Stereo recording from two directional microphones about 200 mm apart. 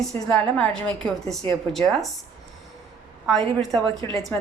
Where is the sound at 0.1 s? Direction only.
5° left (ahead or behind).